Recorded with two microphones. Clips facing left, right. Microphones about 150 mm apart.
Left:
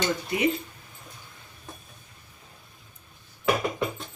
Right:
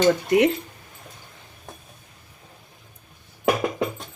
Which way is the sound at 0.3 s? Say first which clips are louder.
Right 7 dB; 75° right (ahead or behind).